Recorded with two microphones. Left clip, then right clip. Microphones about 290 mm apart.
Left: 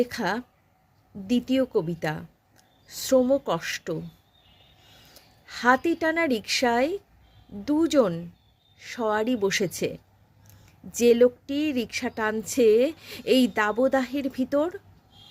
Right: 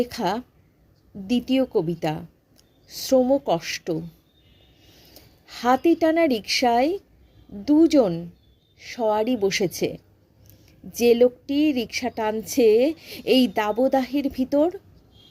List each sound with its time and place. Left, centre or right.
0.0 s a woman's voice: centre
5.1 s a woman's voice: centre